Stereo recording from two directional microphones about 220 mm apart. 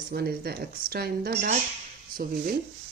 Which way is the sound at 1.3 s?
30° right (ahead or behind).